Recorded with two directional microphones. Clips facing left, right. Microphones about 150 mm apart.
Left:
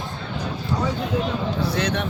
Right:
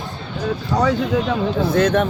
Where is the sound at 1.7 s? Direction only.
50° right (ahead or behind).